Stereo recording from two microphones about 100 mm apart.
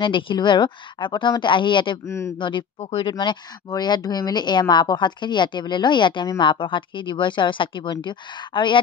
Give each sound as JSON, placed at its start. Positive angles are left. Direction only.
{"t": 0.0, "sound": "speech", "side_deg": 55}
{"t": 2.0, "sound": "speech", "side_deg": 30}
{"t": 2.3, "sound": "speech", "side_deg": 55}